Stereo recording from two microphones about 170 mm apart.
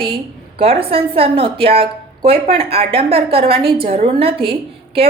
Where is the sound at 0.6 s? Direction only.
35° right (ahead or behind).